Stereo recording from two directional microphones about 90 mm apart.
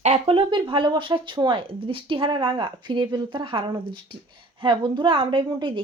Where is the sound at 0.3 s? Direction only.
70° right (ahead or behind).